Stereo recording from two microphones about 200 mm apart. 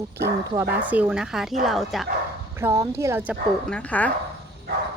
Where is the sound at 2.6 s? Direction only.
15° right (ahead or behind).